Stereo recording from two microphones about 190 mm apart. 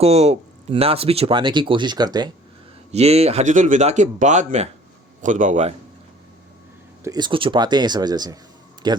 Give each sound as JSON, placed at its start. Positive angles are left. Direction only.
{"t": 0.0, "sound": "speech", "side_deg": -30}
{"t": 2.9, "sound": "speech", "side_deg": -35}
{"t": 7.0, "sound": "speech", "side_deg": -20}